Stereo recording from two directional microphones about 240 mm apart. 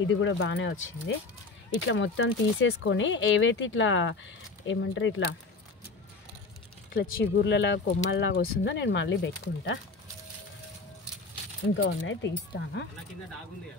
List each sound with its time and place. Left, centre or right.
0.1 s speech: left
6.9 s speech: left
11.7 s speech: left